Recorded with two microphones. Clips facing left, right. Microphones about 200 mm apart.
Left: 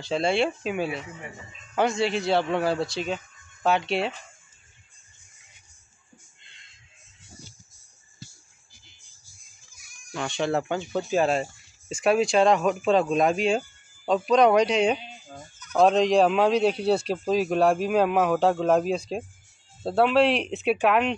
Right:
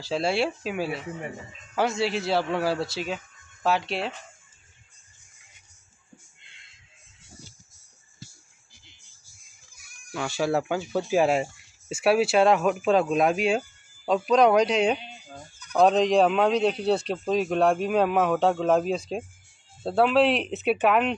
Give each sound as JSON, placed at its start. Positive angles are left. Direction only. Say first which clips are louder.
{"t": 0.0, "sound": "speech", "louder": "left 1 dB", "side_deg": -5}
{"t": 6.4, "sound": "a sound", "louder": "even", "side_deg": -5}
{"t": 9.8, "sound": "music", "louder": "left 1 dB", "side_deg": -55}
{"t": 10.1, "sound": "speech", "louder": "right 1 dB", "side_deg": -5}